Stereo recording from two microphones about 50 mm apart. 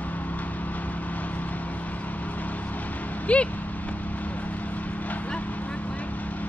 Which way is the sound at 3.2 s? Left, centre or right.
Left.